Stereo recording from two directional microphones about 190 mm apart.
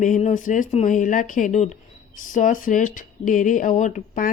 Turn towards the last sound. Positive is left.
turn(degrees=45)  # may be behind; listen again after turning